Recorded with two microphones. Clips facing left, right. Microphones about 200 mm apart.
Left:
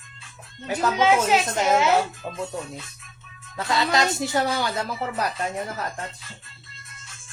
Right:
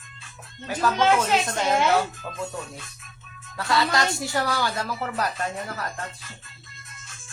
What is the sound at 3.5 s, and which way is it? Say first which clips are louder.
Speech: left 1 dB; 20° left (ahead or behind).